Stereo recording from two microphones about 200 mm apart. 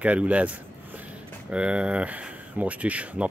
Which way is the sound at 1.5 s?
5° right (ahead or behind).